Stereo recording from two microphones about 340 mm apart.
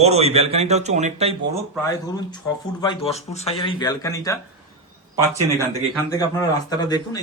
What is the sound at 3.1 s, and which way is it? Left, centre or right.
Speech, centre.